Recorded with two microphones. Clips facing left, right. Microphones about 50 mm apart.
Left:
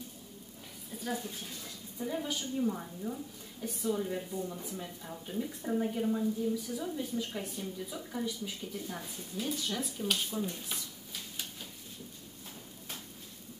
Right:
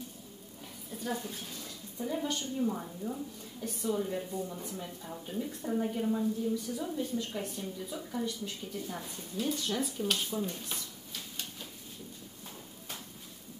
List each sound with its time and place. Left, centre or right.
0.9 s a woman's voice: centre